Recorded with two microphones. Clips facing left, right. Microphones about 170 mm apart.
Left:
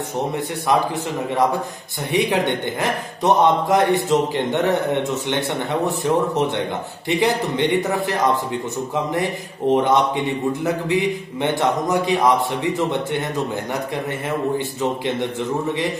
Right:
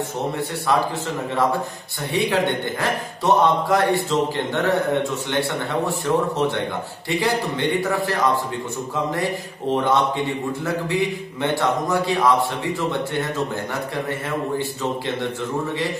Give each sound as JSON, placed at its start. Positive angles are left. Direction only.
{"t": 2.1, "sound": "a man's voice", "side_deg": 15}
{"t": 14.8, "sound": "a man's voice", "side_deg": 20}